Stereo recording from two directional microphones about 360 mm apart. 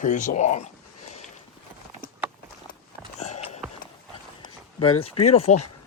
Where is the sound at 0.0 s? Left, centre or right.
Left.